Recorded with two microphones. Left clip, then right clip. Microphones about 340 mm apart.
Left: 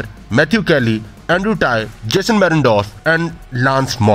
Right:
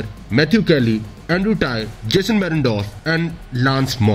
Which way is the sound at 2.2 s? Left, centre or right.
Left.